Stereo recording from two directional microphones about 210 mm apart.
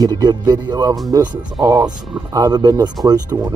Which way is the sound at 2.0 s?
Centre (ahead or behind).